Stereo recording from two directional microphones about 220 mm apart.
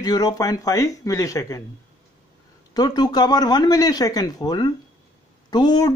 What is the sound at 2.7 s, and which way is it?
A man's voice, 20° left (ahead or behind).